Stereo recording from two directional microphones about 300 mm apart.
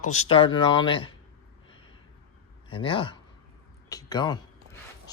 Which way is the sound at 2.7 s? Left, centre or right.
Centre.